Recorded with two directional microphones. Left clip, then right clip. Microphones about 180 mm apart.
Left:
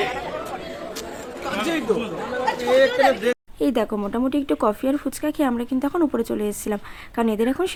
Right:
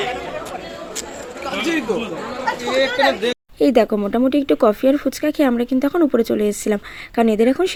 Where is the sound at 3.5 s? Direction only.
15° right (ahead or behind).